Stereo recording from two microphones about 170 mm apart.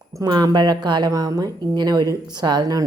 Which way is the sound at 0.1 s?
20° right (ahead or behind).